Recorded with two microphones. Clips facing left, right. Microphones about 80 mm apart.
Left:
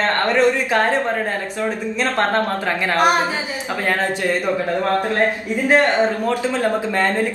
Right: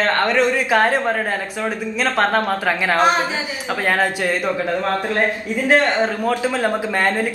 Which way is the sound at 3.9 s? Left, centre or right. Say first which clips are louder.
Right 1 dB; right.